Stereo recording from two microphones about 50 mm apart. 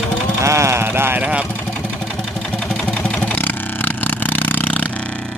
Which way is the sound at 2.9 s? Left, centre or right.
Left.